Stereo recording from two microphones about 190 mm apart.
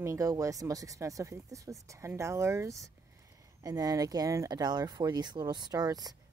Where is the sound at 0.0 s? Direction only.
15° right (ahead or behind).